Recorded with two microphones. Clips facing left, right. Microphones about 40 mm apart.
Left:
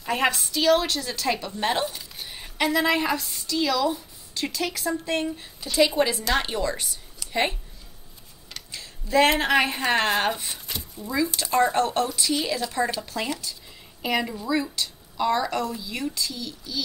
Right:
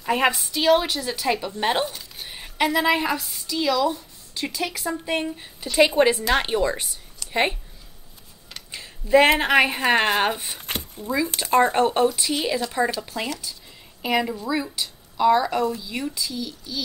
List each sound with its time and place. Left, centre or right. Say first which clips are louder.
0.0 s a woman's voice: right 3 dB; centre
1.9 s a sound: even; centre
2.2 s a woman's voice: right 2 dB; centre
5.6 s speech: right 4 dB; right
6.2 s speech: right 4 dB; centre
8.7 s a sound: right 4 dB; right
9.4 s a woman's voice: right 3 dB; centre
10.7 s a sound: right 7 dB; right
11.4 s speech: right 4 dB; right
11.7 s speech: right 4 dB; right
12.6 s a woman's voice: right 2 dB; centre